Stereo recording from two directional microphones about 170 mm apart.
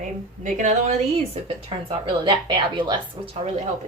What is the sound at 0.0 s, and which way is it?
Speech, 45° right (ahead or behind).